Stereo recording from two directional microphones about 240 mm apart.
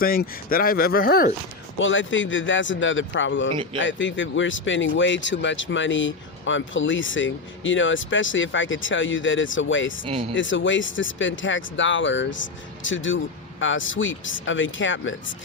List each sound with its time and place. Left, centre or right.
0.0 s speech: left
1.8 s speech: left
10.1 s speech: right
10.3 s speech: left